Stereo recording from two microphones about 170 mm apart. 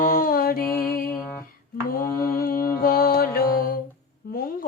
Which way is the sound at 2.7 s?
60° left (ahead or behind).